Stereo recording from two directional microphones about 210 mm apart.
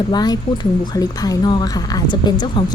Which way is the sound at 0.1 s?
20° left (ahead or behind).